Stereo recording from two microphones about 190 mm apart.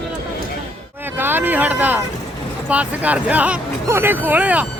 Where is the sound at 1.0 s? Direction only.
10° right (ahead or behind).